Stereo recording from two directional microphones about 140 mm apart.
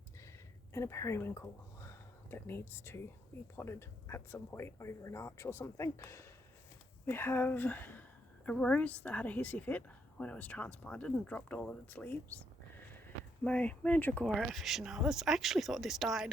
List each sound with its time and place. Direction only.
0.7 s speech: 20° left (ahead or behind)
13.4 s speech: 10° left (ahead or behind)